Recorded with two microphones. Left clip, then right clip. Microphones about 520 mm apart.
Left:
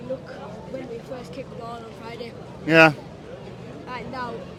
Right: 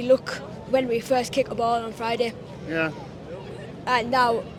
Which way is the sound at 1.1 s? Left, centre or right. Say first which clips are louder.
Right 13 dB; right.